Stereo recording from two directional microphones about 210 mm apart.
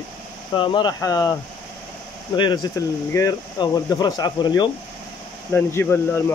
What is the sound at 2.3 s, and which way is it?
Speech, 20° left (ahead or behind).